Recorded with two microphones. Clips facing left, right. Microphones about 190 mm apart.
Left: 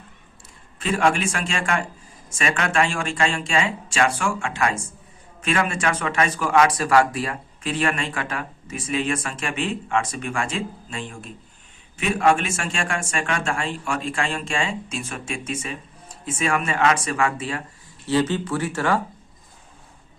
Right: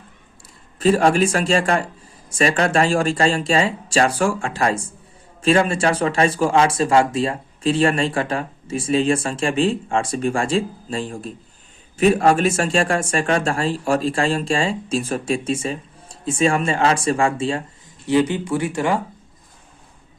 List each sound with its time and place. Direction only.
0.8 s speech: 35° right (ahead or behind)
18.0 s speech: 15° right (ahead or behind)